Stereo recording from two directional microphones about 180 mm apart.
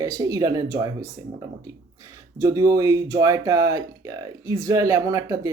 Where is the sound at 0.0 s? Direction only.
20° right (ahead or behind).